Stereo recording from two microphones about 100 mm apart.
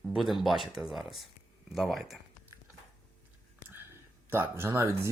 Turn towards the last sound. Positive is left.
turn(degrees=-25)  # may be behind; listen again after turning